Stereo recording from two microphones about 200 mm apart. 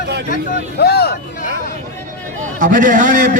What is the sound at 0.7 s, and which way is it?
Speech, 55° left (ahead or behind).